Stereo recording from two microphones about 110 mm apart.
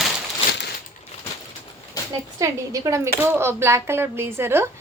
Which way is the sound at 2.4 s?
30° right (ahead or behind).